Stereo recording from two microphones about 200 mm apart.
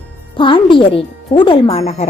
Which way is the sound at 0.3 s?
25° left (ahead or behind).